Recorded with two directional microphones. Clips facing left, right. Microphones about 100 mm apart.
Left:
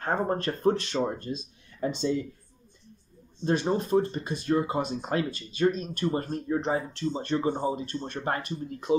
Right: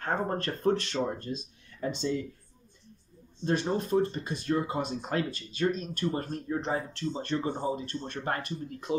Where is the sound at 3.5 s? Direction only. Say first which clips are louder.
Left 3 dB; 15° left (ahead or behind).